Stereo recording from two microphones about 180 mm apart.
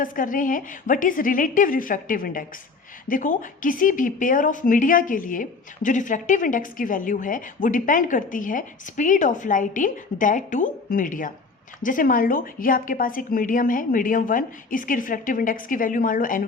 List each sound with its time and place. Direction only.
0.0 s a woman's voice: 50° left (ahead or behind)